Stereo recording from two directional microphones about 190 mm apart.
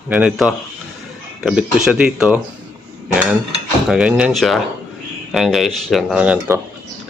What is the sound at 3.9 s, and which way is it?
Speech, 5° right (ahead or behind).